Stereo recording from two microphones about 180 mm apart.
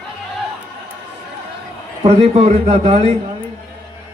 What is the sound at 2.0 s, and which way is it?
A man's voice, 35° right (ahead or behind).